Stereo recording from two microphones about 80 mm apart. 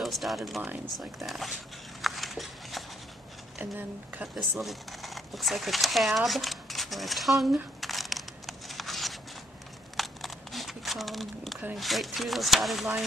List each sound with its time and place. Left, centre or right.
0.0 s speech: centre
2.0 s dog: centre
3.5 s speech: right
4.4 s speech: centre
7.8 s a sound: centre
9.9 s crumpling: centre
11.7 s speech: centre